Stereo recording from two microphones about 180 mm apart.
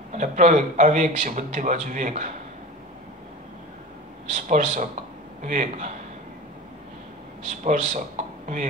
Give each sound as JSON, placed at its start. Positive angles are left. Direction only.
{"t": 0.1, "sound": "a man's voice", "side_deg": -45}
{"t": 4.3, "sound": "a man's voice", "side_deg": -45}
{"t": 7.4, "sound": "a man's voice", "side_deg": -45}